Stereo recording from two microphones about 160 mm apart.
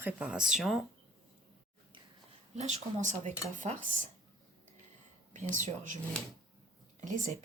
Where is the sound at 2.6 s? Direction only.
45° right (ahead or behind).